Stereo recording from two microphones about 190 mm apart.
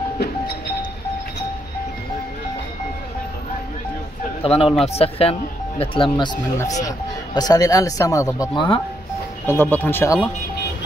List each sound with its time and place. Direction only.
4.4 s speech: 30° left (ahead or behind)
9.5 s speech: 10° left (ahead or behind)